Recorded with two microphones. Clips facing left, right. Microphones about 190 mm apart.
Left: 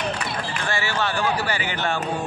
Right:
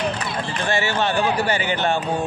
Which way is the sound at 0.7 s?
20° right (ahead or behind).